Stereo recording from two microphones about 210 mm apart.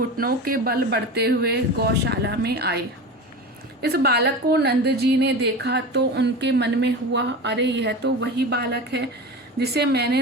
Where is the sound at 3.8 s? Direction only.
50° right (ahead or behind).